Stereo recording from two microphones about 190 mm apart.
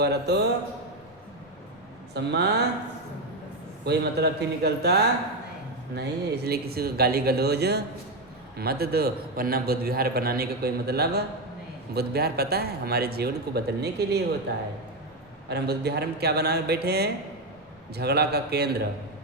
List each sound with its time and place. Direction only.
0.0 s a man's voice: 60° right (ahead or behind)
2.1 s a man's voice: 60° right (ahead or behind)
3.8 s a man's voice: 60° right (ahead or behind)